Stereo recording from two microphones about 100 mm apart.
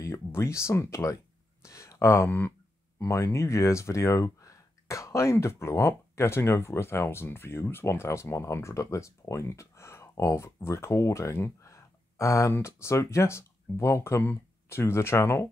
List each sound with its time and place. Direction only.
0.0 s speech: 30° left (ahead or behind)
1.6 s a sound: 30° left (ahead or behind)
3.0 s speech: 30° left (ahead or behind)